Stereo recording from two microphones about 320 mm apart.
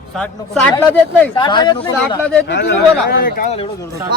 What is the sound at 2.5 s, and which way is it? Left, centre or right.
Speech, left.